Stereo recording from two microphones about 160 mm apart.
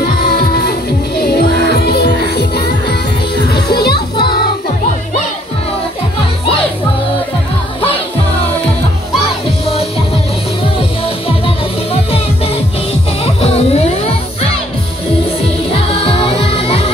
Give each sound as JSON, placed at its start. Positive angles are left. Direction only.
{"t": 0.0, "sound": "music", "side_deg": 75}
{"t": 11.4, "sound": "music", "side_deg": 35}
{"t": 13.2, "sound": "music", "side_deg": 40}
{"t": 15.7, "sound": "music", "side_deg": 35}